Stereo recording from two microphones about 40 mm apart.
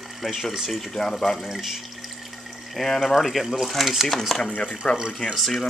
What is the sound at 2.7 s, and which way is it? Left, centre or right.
Speech, centre.